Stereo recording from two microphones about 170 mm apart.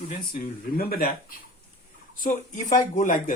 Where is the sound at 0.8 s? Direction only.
60° left (ahead or behind).